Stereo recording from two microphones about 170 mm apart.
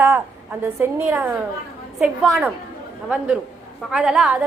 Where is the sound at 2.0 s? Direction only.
Centre (ahead or behind).